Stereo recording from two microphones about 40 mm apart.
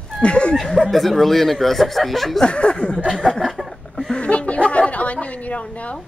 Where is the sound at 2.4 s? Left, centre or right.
Left.